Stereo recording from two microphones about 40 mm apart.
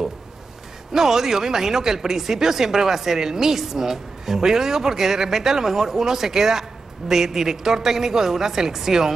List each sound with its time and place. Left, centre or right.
0.9 s speech: centre